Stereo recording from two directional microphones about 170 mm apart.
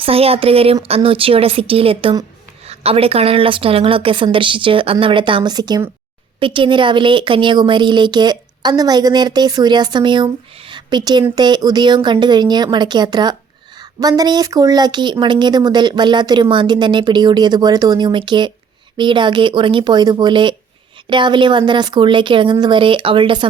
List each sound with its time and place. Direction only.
0.0 s speech: 35° right (ahead or behind)